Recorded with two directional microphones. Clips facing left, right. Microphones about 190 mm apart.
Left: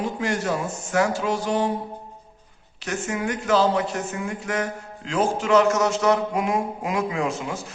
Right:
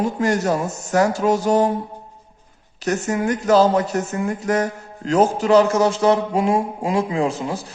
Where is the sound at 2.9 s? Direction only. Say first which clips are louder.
Right 6 dB; 40° right (ahead or behind).